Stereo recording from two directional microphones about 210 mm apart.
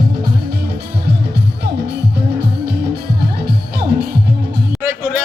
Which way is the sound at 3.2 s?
50° right (ahead or behind).